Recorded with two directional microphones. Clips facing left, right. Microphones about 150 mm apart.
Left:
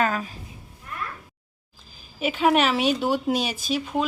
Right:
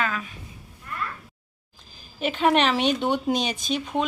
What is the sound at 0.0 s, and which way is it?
Speech, 35° left (ahead or behind).